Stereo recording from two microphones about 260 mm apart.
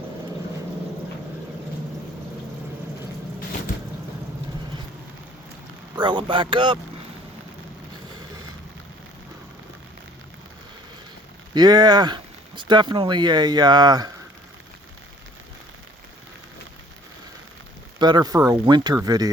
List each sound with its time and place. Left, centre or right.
6.0 s speech: centre
11.5 s speech: centre
18.0 s speech: centre